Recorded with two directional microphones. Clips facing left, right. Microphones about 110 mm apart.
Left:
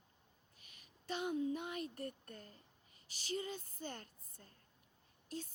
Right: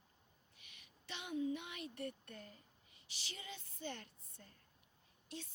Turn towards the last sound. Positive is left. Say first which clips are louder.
# left 4 dB
turn(degrees=40)  # may be behind; listen again after turning